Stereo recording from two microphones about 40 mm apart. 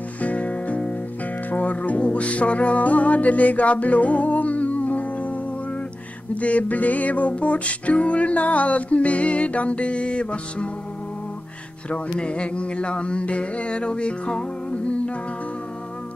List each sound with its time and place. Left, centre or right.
0.2 s music: left
11.9 s music: left